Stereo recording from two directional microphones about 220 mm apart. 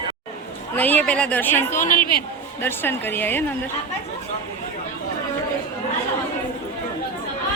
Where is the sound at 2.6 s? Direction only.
10° left (ahead or behind).